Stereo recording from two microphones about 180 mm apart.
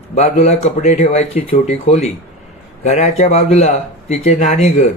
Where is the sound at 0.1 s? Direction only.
40° left (ahead or behind).